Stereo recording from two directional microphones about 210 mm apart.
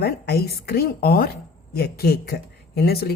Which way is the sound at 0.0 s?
50° left (ahead or behind).